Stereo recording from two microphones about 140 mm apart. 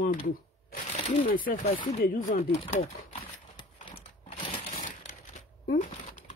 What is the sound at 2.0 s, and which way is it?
Speech, 90° left.